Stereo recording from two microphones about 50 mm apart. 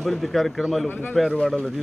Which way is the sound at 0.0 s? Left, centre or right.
Centre.